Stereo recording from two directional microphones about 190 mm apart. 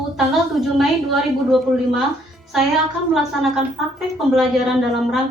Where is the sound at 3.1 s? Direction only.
Centre (ahead or behind).